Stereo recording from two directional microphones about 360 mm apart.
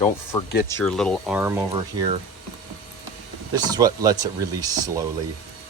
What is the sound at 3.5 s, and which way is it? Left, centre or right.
Speech, centre.